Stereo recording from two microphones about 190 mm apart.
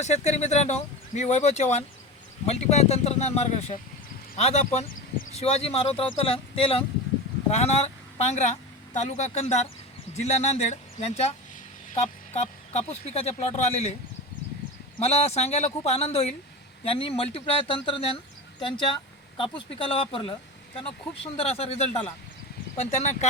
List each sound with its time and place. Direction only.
0.0 s speech: 35° left (ahead or behind)
15.0 s speech: 35° left (ahead or behind)
21.3 s speech: 30° left (ahead or behind)